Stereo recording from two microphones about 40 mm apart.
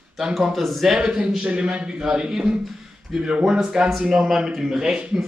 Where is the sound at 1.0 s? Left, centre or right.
Centre.